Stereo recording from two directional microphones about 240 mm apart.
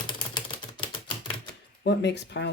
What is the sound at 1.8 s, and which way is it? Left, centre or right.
Speech, left.